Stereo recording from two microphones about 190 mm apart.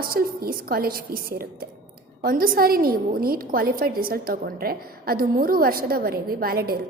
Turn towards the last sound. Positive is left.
turn(degrees=-55)  # may be behind; listen again after turning